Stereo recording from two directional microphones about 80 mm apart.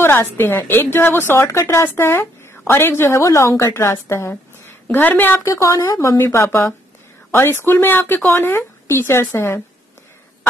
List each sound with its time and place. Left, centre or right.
0.0 s a woman's voice: left
5.4 s a woman's voice: left